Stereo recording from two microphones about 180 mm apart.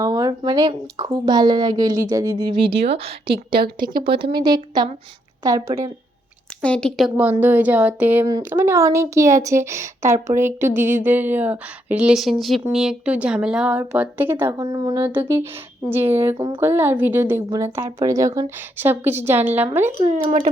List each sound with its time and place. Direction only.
0.0 s a woman's voice: 20° right (ahead or behind)
3.2 s speech: 60° right (ahead or behind)
4.2 s a woman's voice: 25° right (ahead or behind)
6.6 s a woman's voice: 5° left (ahead or behind)
7.3 s speech: 10° right (ahead or behind)